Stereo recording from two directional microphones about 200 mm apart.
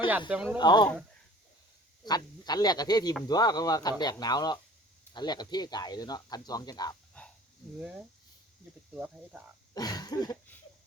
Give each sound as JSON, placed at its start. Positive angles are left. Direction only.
{"t": 0.3, "sound": "speech", "side_deg": -5}
{"t": 0.6, "sound": "speech", "side_deg": 20}
{"t": 2.0, "sound": "speech", "side_deg": 20}
{"t": 7.8, "sound": "speech", "side_deg": -5}
{"t": 9.7, "sound": "speech", "side_deg": 20}